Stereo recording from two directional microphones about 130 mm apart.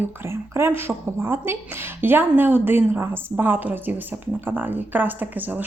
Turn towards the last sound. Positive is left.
turn(degrees=-15)  # may be behind; listen again after turning